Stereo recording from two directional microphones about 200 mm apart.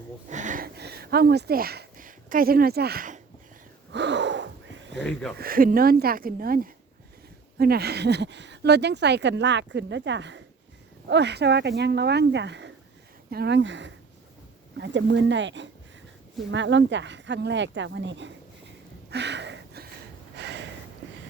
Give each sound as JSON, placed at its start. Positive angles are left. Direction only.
{"t": 0.3, "sound": "sniff", "side_deg": -40}
{"t": 3.9, "sound": "wheeze", "side_deg": -60}
{"t": 5.4, "sound": "speech", "side_deg": -45}
{"t": 19.1, "sound": "a sound", "side_deg": -60}